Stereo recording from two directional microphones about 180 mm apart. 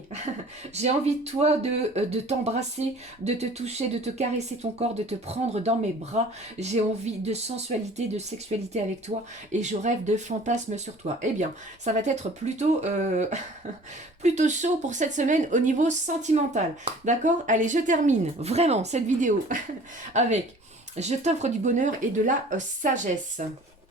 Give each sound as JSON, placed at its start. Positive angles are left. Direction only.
{"t": 0.7, "sound": "speech", "side_deg": -35}
{"t": 20.9, "sound": "speech", "side_deg": -40}